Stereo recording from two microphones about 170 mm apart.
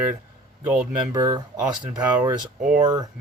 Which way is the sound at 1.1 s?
25° right (ahead or behind).